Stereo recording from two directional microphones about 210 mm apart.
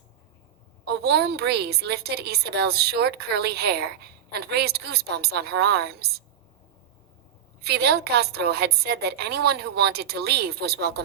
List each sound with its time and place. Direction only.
0.9 s a woman's voice: 50° right (ahead or behind)
7.6 s a woman's voice: 50° right (ahead or behind)